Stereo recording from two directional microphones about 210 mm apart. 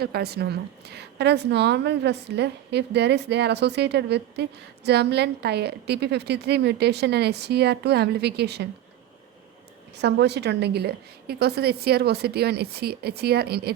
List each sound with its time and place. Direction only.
0.0 s a woman's voice: 50° right (ahead or behind)
10.0 s a woman's voice: 55° right (ahead or behind)